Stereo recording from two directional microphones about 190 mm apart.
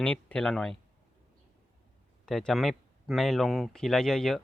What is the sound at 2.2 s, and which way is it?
Speech, centre (ahead or behind).